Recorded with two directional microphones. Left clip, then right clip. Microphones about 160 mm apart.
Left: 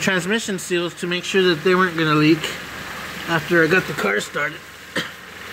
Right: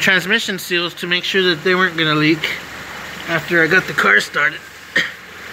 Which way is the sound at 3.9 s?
15° left (ahead or behind).